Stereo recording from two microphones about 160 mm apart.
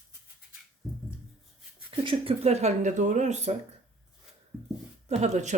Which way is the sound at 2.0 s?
40° right (ahead or behind).